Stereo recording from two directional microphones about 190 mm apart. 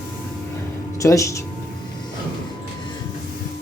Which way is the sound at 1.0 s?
15° left (ahead or behind).